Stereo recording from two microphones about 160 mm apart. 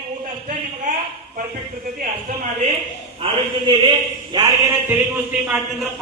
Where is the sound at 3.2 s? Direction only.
35° right (ahead or behind).